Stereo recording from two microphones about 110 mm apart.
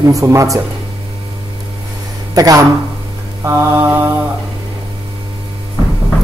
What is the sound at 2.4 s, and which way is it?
Speech, 35° right (ahead or behind).